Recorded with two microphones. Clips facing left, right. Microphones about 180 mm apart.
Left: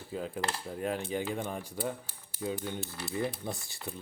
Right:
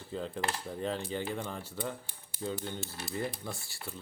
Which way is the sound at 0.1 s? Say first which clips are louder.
Even; 10° left (ahead or behind).